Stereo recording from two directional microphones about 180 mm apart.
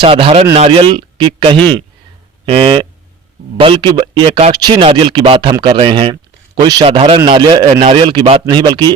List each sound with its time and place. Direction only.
0.0 s a man's voice: 30° right (ahead or behind)
1.5 s speech: 10° left (ahead or behind)
2.5 s a man's voice: 30° right (ahead or behind)